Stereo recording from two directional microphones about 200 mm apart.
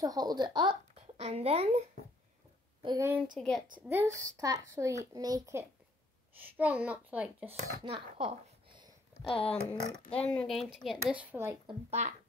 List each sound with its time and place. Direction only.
0.0 s speech: 20° right (ahead or behind)
0.9 s a child's voice: 35° right (ahead or behind)
2.8 s a woman's voice: 20° right (ahead or behind)
3.3 s speech: centre (ahead or behind)
3.8 s a child's voice: 10° right (ahead or behind)
7.8 s speech: 30° right (ahead or behind)
9.5 s a child's voice: 5° left (ahead or behind); by 11.5 s 10° right (ahead or behind)
11.6 s speech: 35° right (ahead or behind)